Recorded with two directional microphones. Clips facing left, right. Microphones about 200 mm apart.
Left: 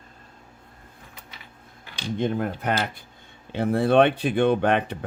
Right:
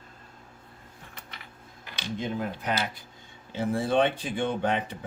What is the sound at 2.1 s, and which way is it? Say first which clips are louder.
Speech: left 6 dB; 55° left (ahead or behind).